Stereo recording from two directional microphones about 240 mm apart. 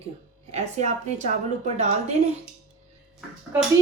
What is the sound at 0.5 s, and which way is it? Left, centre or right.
Speech, right.